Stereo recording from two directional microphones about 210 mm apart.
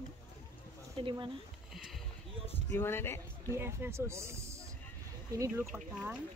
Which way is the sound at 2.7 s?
10° left (ahead or behind).